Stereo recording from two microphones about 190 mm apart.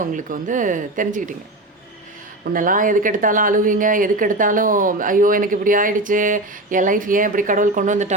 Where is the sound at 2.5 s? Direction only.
45° right (ahead or behind).